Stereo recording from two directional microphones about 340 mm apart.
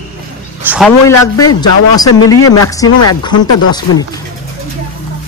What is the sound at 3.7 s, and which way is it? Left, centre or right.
Speech, centre.